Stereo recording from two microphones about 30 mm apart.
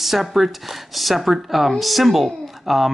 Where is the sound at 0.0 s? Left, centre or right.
Centre.